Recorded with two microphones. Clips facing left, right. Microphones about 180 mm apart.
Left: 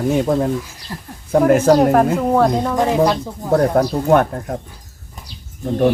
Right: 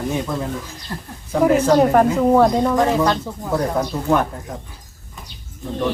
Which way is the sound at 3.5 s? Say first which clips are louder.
Left 6 dB; 55° left (ahead or behind).